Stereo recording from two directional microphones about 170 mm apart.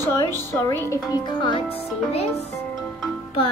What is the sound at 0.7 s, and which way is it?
Speech, 20° left (ahead or behind).